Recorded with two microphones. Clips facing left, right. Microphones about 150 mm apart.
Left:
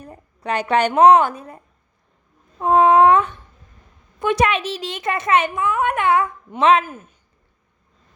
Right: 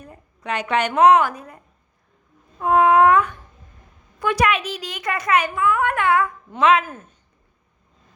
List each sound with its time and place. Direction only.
0.0 s a woman's voice: 35° left (ahead or behind)
2.6 s a sound: 25° left (ahead or behind)
4.2 s a woman's voice: 25° left (ahead or behind)
6.8 s speech: 10° left (ahead or behind)